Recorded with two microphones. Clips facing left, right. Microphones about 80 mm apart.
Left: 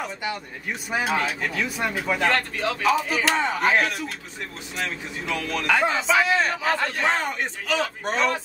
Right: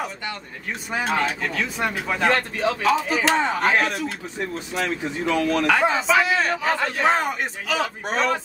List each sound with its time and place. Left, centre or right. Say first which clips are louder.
0.9 s a man's voice: right 1 dB; centre
2.1 s speech: right 4 dB; centre
2.8 s a man's voice: even; centre
4.7 s speech: right 5 dB; right
5.7 s a man's voice: left 1 dB; centre